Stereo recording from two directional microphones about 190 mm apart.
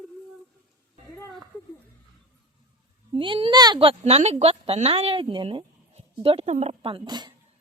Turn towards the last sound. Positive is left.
turn(degrees=-25)  # may be behind; listen again after turning